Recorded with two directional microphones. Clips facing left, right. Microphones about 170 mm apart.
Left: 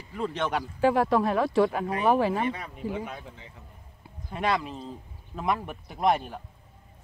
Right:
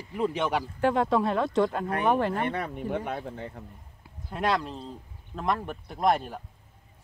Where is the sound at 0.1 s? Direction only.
10° right (ahead or behind).